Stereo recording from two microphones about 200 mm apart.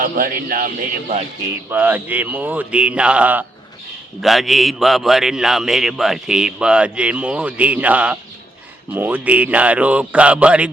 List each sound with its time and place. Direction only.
0.0 s a man's voice: 45° right (ahead or behind)
1.7 s a man's voice: 10° right (ahead or behind)